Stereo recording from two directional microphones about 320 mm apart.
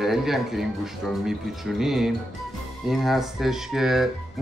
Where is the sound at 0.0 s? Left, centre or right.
Centre.